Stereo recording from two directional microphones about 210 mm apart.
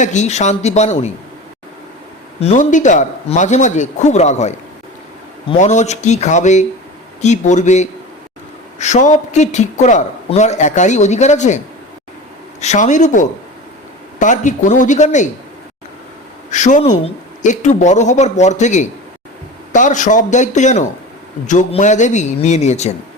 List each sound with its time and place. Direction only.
0.0 s a man's voice: 35° left (ahead or behind)
2.4 s a man's voice: 35° left (ahead or behind)
16.5 s a man's voice: 35° left (ahead or behind)